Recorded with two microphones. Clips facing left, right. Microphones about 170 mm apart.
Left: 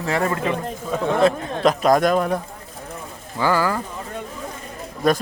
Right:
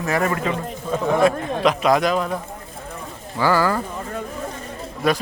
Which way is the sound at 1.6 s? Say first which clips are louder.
Left 2 dB; 40° left (ahead or behind).